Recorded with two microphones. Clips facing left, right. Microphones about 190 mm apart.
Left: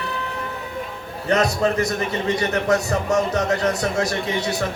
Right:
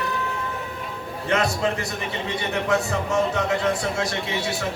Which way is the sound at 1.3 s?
40° left (ahead or behind).